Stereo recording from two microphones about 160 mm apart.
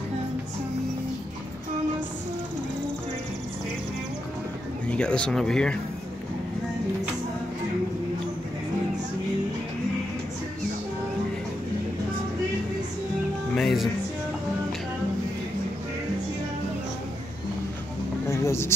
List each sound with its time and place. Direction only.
4.8 s speech: 5° left (ahead or behind)
13.6 s music: centre (ahead or behind)
18.2 s music: 15° left (ahead or behind)